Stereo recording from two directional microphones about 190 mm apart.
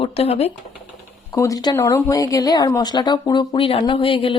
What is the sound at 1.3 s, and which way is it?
Speech, 20° left (ahead or behind).